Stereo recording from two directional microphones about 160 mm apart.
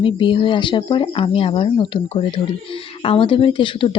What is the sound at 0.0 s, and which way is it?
Speech, 30° left (ahead or behind).